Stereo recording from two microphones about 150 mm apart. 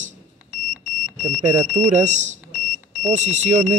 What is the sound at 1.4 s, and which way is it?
A man's voice, 55° right (ahead or behind).